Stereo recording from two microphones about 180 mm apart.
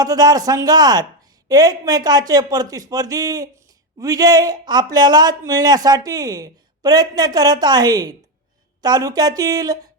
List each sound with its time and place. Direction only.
0.0 s speech: 20° right (ahead or behind)